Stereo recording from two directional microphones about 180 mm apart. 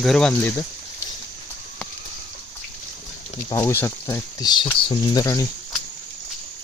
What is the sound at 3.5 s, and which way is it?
Speech, 15° left (ahead or behind).